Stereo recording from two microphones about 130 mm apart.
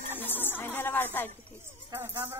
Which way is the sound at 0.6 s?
15° left (ahead or behind).